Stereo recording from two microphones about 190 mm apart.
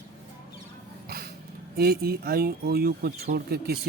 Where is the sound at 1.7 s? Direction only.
55° right (ahead or behind).